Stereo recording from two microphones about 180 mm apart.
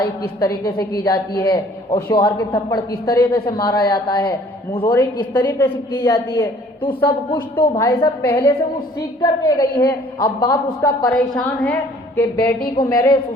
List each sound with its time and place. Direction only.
0.0 s a woman's voice: 20° left (ahead or behind)
5.3 s a woman's voice: 10° left (ahead or behind)
6.8 s a woman's voice: 30° left (ahead or behind)
7.5 s a woman's voice: 15° left (ahead or behind)
12.7 s a woman's voice: 20° left (ahead or behind)